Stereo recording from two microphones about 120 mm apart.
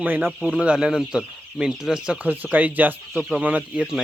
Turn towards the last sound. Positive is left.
turn(degrees=-10)  # may be behind; listen again after turning